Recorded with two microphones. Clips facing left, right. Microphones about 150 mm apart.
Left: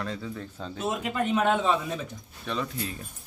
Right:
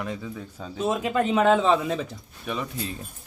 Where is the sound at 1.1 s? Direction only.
90° right.